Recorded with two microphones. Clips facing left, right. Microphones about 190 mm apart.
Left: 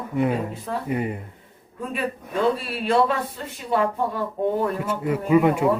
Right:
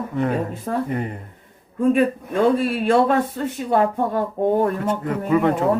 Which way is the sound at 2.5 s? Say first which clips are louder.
Right 4 dB; 45° right (ahead or behind).